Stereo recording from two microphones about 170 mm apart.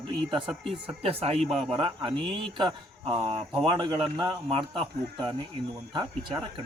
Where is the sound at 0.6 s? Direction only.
35° right (ahead or behind).